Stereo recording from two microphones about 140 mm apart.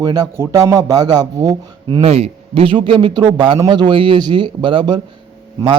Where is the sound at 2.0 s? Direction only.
45° right (ahead or behind).